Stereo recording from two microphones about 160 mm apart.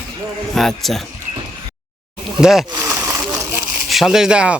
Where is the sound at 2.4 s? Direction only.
Centre (ahead or behind).